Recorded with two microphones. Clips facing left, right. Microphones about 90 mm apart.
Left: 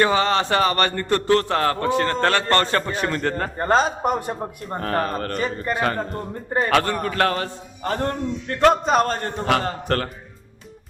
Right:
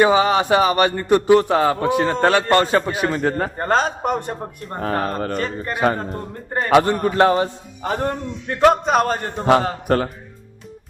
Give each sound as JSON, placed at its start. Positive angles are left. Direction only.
{"t": 0.0, "sound": "a man's voice", "side_deg": -15}
{"t": 6.0, "sound": "speech", "side_deg": 0}
{"t": 6.7, "sound": "a man's voice", "side_deg": -20}
{"t": 8.5, "sound": "a man's voice", "side_deg": 0}